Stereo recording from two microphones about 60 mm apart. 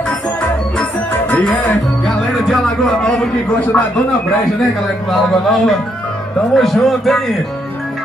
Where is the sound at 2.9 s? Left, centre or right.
Centre.